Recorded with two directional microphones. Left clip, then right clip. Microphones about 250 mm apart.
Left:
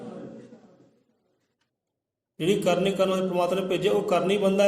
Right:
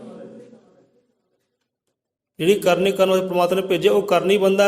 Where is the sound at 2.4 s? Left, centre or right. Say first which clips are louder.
Right 6 dB; right.